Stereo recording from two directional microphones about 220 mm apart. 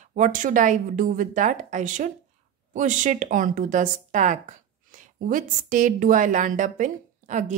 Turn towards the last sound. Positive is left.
turn(degrees=-35)  # may be behind; listen again after turning